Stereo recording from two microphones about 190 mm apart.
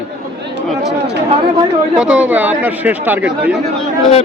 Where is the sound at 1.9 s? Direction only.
5° right (ahead or behind).